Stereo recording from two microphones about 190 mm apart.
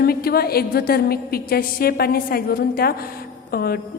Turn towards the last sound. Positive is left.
turn(degrees=55)  # may be behind; listen again after turning